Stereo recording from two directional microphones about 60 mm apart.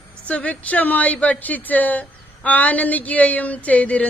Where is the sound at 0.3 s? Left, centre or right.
Left.